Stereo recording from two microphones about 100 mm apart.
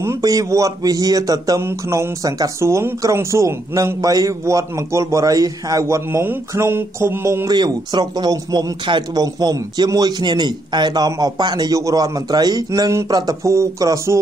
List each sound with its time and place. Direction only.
0.0 s speech: 30° right (ahead or behind)
7.4 s speech: 45° right (ahead or behind)